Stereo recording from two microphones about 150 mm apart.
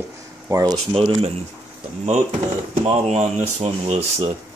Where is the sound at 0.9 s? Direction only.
40° right (ahead or behind).